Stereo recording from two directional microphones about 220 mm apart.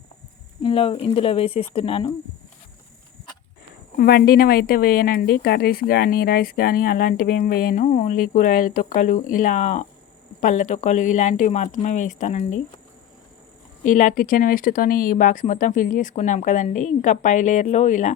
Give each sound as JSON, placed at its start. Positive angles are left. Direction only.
{"t": 0.6, "sound": "speech", "side_deg": 25}
{"t": 3.9, "sound": "a woman's voice", "side_deg": 45}
{"t": 13.8, "sound": "a woman's voice", "side_deg": 35}